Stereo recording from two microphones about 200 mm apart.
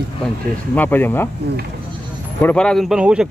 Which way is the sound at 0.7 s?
10° left (ahead or behind).